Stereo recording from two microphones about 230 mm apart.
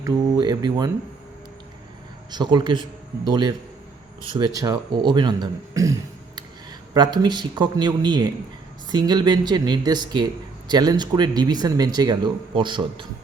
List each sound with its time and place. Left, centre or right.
0.0 s speech: centre
2.3 s speech: centre